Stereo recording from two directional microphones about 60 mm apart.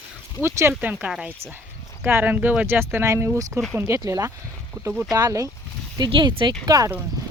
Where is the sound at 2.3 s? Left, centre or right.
Right.